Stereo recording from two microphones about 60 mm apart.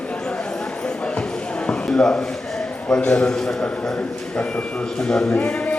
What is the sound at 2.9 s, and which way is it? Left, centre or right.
A man's voice, centre.